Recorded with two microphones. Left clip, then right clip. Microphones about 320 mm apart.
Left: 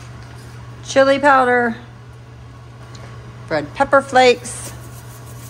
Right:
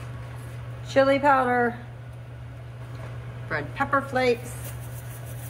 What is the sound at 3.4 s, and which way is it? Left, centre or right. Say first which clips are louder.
Speech: left 9 dB; centre.